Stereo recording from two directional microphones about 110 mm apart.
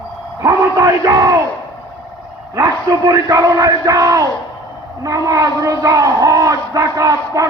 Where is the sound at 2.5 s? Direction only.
30° right (ahead or behind).